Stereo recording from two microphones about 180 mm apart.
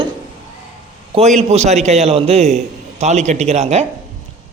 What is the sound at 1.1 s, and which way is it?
A man's voice, 40° right (ahead or behind).